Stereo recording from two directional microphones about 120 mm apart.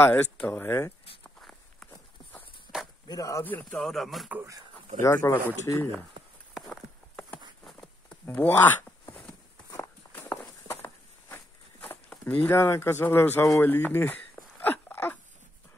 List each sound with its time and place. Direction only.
0.0 s speech: 15° left (ahead or behind)
1.4 s walk: centre (ahead or behind)
2.7 s chop: 5° right (ahead or behind)
3.1 s speech: 30° left (ahead or behind)
3.7 s a man's voice: centre (ahead or behind)
5.0 s speech: 20° left (ahead or behind)
6.5 s a sound: centre (ahead or behind)
8.4 s speech: 15° left (ahead or behind)
9.7 s walk: 20° left (ahead or behind)
12.1 s speech: 10° left (ahead or behind)
13.6 s a sound: 15° left (ahead or behind)